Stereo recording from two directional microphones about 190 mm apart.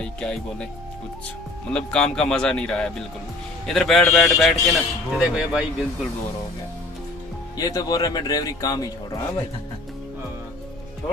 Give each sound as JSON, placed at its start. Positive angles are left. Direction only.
{"t": 0.0, "sound": "speech", "side_deg": 5}
{"t": 1.7, "sound": "speech", "side_deg": 5}
{"t": 7.5, "sound": "speech", "side_deg": 20}